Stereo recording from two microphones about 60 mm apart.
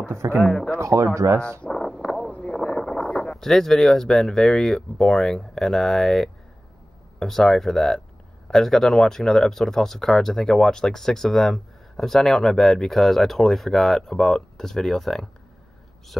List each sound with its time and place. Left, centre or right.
0.1 s a sound: right
0.5 s speech: centre
0.7 s speech: right
1.4 s speech: left
1.7 s a sound: centre
2.4 s boat: centre
3.3 s speech: centre